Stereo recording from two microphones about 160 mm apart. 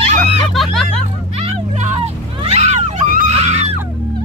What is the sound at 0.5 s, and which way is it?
Hubbub, centre (ahead or behind).